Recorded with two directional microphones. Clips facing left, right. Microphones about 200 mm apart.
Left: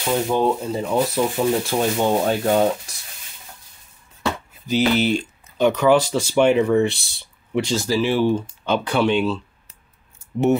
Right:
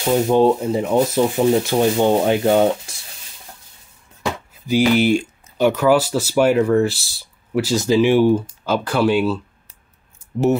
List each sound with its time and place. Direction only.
0.0 s speech: 20° right (ahead or behind)
4.6 s speech: 10° right (ahead or behind)
7.7 s speech: 20° right (ahead or behind)